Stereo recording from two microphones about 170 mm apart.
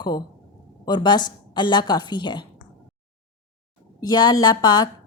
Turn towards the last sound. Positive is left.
turn(degrees=25)  # may be behind; listen again after turning